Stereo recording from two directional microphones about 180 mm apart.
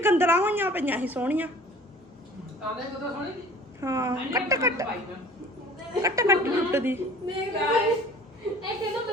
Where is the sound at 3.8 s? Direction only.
15° right (ahead or behind).